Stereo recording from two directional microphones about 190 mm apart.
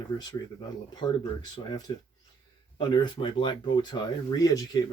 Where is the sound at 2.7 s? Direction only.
25° left (ahead or behind).